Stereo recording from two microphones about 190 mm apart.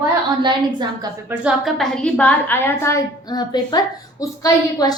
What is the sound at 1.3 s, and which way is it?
A woman's voice, 5° right (ahead or behind).